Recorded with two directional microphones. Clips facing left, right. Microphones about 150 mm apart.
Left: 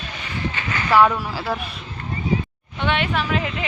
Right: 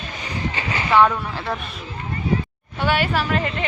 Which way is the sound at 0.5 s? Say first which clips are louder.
Right 1 dB; 30° right (ahead or behind).